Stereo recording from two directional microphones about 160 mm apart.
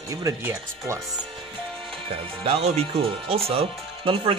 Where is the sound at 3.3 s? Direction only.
35° right (ahead or behind).